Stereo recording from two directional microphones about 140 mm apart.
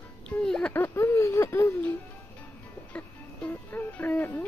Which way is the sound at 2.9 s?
10° left (ahead or behind).